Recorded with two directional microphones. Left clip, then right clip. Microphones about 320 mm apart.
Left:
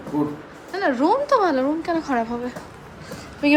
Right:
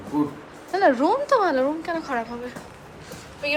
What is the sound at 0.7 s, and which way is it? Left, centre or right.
A woman's voice, centre.